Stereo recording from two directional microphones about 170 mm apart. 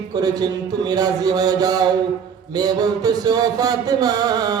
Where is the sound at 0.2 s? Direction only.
20° right (ahead or behind).